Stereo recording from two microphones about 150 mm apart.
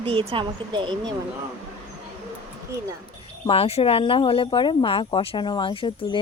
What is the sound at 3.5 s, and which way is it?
Speech, 40° left (ahead or behind).